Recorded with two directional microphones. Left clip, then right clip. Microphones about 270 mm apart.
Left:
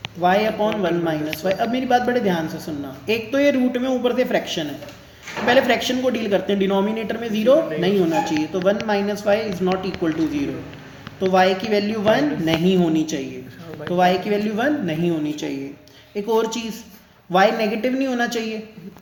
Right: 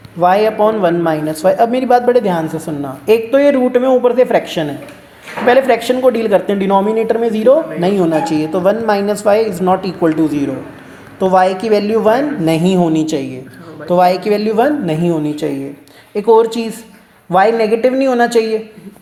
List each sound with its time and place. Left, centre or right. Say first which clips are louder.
0.2 s a woman's voice: right 8 dB; right